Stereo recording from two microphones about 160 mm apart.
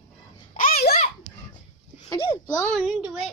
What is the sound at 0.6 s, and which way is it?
Babbling, 65° left (ahead or behind).